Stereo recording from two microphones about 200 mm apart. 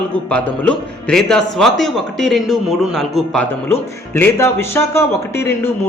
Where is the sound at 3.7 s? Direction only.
15° left (ahead or behind).